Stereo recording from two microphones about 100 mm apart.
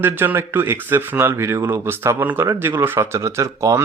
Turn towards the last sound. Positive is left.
turn(degrees=-30)  # may be behind; listen again after turning